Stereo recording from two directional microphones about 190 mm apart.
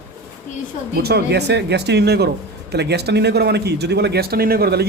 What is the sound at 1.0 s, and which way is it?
A man's voice, 60° right (ahead or behind).